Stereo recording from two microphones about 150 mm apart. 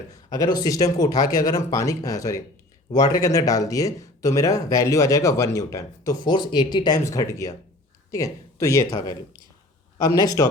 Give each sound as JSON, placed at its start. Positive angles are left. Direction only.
{"t": 0.1, "sound": "speech", "side_deg": 25}